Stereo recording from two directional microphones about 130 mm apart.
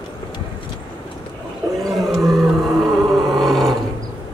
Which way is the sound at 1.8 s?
Centre (ahead or behind).